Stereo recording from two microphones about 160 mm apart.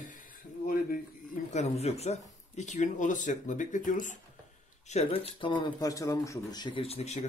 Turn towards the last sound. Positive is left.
turn(degrees=40)  # may be behind; listen again after turning